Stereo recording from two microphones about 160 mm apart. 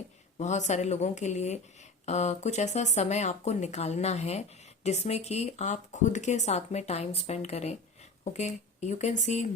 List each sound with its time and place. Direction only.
0.3 s speech: 45° left (ahead or behind)